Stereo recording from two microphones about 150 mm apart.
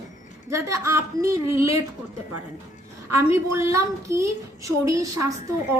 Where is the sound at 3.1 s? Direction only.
15° right (ahead or behind).